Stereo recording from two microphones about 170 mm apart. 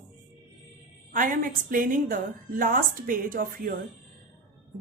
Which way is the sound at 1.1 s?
55° right (ahead or behind).